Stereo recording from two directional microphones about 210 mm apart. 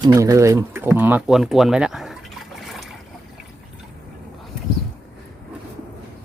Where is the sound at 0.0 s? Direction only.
15° right (ahead or behind).